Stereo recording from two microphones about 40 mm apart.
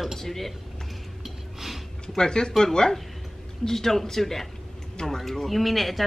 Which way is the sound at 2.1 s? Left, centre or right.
Centre.